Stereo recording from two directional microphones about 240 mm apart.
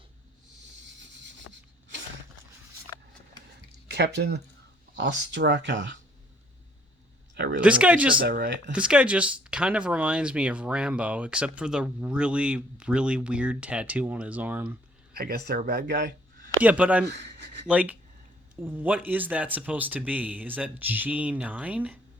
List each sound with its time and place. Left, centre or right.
3.8 s speech: right
7.3 s a sound: right
7.6 s speech: centre
8.2 s speech: right
8.7 s speech: centre
15.1 s speech: right
16.6 s speech: centre
17.1 s speech: right
17.7 s speech: centre